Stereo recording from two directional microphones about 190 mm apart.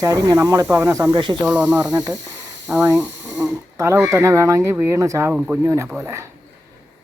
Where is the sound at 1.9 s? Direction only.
20° right (ahead or behind).